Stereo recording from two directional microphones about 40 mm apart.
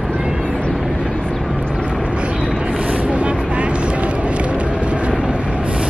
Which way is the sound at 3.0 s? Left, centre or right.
Right.